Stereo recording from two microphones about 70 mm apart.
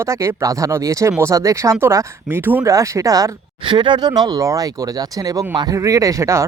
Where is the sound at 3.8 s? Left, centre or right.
Right.